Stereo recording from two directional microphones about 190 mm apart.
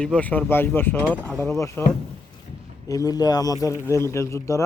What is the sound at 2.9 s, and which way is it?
Speech, 20° left (ahead or behind).